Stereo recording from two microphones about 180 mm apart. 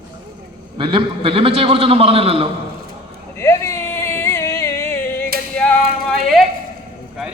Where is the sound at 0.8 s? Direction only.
30° right (ahead or behind).